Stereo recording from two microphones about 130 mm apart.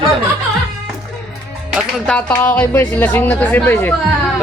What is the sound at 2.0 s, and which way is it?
Speech, 10° left (ahead or behind).